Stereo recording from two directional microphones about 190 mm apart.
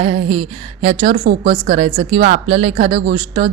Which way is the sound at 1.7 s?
30° right (ahead or behind).